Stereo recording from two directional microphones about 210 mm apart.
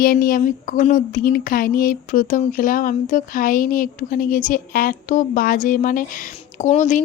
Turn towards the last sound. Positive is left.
turn(degrees=35)  # may be behind; listen again after turning